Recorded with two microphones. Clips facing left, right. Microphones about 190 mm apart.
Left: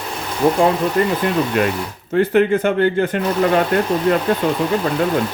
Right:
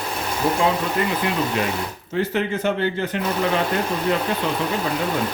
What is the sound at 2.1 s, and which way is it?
A man's voice, 55° left (ahead or behind).